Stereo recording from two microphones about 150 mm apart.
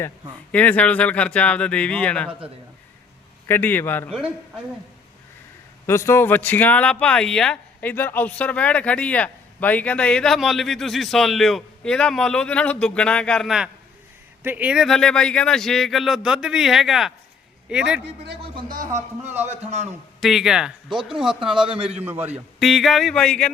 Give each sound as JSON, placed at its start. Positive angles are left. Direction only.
{"t": 0.5, "sound": "speech", "side_deg": 10}
{"t": 3.4, "sound": "speech", "side_deg": 15}
{"t": 5.8, "sound": "speech", "side_deg": 20}
{"t": 18.5, "sound": "a man's voice", "side_deg": -65}
{"t": 20.2, "sound": "speech", "side_deg": 0}